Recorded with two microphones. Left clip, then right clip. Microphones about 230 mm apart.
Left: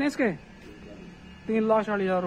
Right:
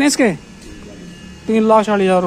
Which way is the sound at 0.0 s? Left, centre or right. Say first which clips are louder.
Right 12 dB; centre.